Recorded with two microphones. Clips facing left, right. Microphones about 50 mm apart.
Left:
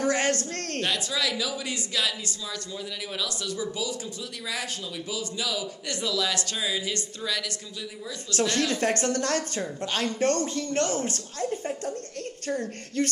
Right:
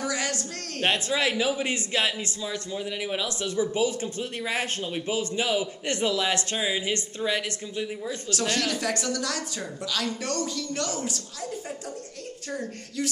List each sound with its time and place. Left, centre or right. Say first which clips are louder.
0.0 s a sound: left 4 dB; left
0.7 s speech: right 4 dB; right
8.5 s a woman's voice: left 2 dB; left